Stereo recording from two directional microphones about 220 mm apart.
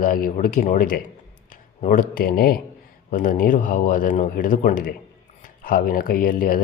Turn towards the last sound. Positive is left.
turn(degrees=40)  # may be behind; listen again after turning